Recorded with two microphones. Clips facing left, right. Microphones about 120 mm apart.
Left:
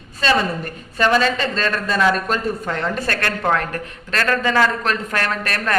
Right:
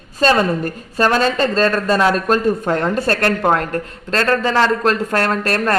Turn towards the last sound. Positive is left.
turn(degrees=-35)  # may be behind; listen again after turning